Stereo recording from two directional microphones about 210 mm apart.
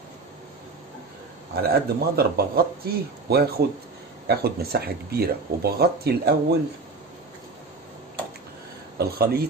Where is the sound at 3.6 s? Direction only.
50° right (ahead or behind).